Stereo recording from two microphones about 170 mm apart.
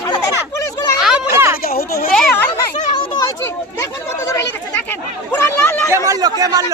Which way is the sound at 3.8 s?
15° left (ahead or behind).